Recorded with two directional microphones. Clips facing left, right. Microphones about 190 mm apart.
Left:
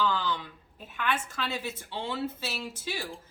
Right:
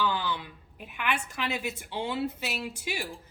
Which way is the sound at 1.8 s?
15° right (ahead or behind).